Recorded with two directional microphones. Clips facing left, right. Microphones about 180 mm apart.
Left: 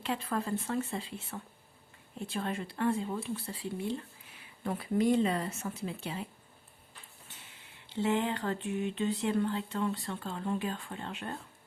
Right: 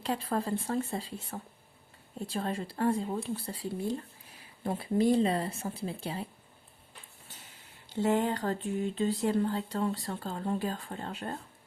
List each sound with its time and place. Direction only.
0.0 s speech: 35° right (ahead or behind)
7.9 s speech: 40° right (ahead or behind)